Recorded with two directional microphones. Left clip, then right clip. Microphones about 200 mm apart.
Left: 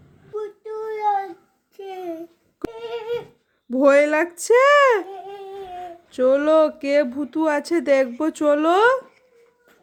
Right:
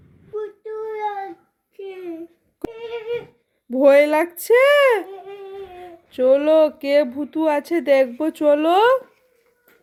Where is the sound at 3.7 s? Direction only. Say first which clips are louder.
Right 2 dB; 10° left (ahead or behind).